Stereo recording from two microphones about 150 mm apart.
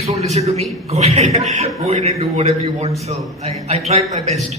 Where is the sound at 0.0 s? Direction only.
45° right (ahead or behind).